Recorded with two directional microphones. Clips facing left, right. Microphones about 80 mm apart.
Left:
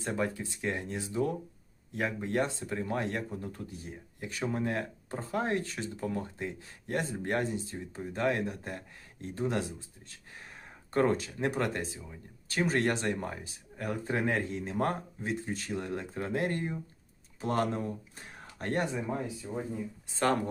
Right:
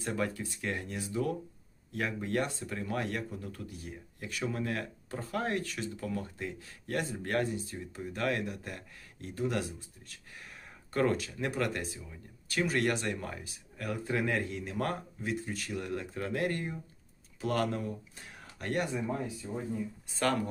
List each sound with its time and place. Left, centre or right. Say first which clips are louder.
0.0 s speech: left 1 dB; left
20.1 s speech: left 2 dB; left